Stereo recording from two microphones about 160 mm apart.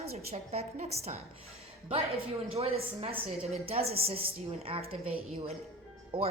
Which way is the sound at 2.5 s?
40° right (ahead or behind).